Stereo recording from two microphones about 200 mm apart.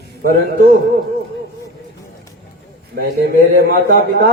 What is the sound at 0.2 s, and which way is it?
Speech, 50° right (ahead or behind).